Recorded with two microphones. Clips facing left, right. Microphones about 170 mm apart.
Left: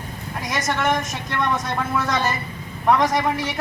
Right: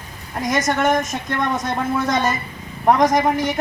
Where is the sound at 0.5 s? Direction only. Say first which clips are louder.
Right 4 dB; 20° right (ahead or behind).